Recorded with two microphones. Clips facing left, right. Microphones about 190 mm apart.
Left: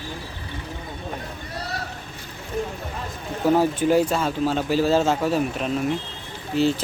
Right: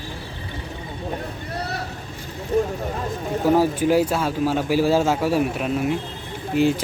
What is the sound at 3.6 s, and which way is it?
Speech, 10° right (ahead or behind).